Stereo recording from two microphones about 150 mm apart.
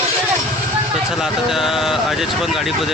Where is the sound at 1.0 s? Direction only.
5° right (ahead or behind).